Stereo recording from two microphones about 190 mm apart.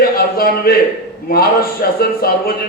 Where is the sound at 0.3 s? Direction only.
50° left (ahead or behind).